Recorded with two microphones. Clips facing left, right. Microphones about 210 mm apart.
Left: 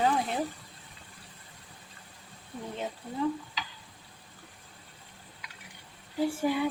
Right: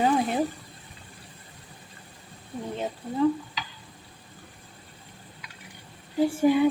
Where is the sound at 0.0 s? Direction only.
15° right (ahead or behind).